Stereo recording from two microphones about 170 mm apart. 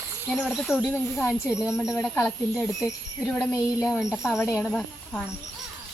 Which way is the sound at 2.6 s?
20° left (ahead or behind).